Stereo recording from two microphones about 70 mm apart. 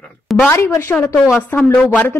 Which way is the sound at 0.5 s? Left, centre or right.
Left.